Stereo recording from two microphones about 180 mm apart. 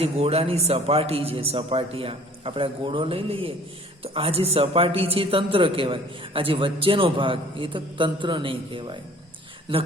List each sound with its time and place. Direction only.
0.0 s a man's voice: 35° right (ahead or behind)